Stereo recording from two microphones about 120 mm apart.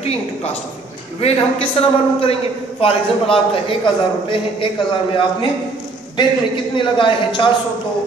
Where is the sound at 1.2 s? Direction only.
50° left (ahead or behind).